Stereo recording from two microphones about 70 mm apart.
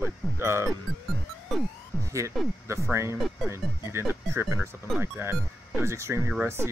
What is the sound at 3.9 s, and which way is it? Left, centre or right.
Speech, right.